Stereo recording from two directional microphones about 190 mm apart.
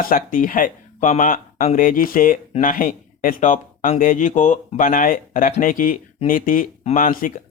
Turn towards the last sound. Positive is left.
turn(degrees=45)  # may be behind; listen again after turning